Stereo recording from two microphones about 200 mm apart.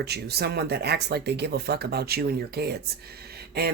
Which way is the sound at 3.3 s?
55° right (ahead or behind).